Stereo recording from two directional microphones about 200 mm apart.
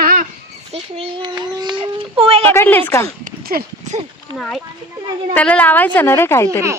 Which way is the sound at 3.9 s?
35° right (ahead or behind).